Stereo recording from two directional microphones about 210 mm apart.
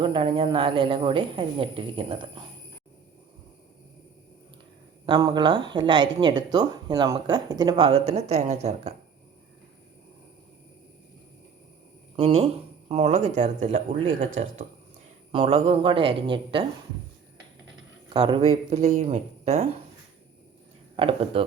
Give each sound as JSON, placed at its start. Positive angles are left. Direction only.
{"t": 0.0, "sound": "a woman's voice", "side_deg": -25}
{"t": 5.0, "sound": "a woman's voice", "side_deg": -20}
{"t": 8.1, "sound": "speech", "side_deg": -35}
{"t": 12.1, "sound": "speech", "side_deg": -30}
{"t": 15.3, "sound": "a woman's voice", "side_deg": -25}
{"t": 18.1, "sound": "speech", "side_deg": -25}
{"t": 20.9, "sound": "a woman's voice", "side_deg": -25}